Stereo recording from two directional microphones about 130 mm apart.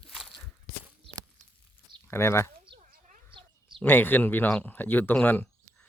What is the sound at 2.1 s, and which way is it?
Speech, 20° left (ahead or behind).